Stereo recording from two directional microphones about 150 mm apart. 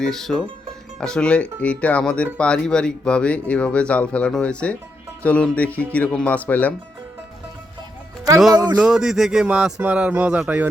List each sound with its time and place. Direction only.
0.0 s speech: 5° left (ahead or behind)
8.5 s speech: 30° right (ahead or behind)
8.8 s speech: 5° right (ahead or behind)